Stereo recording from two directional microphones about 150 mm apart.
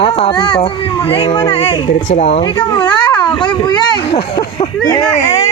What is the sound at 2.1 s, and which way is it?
Speech, 50° left (ahead or behind).